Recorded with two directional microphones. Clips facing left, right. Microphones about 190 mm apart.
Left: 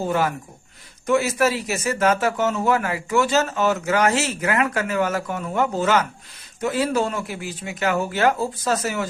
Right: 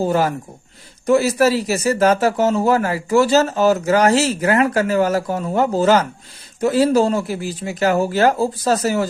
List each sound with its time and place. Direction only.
0.0 s speech: 35° right (ahead or behind)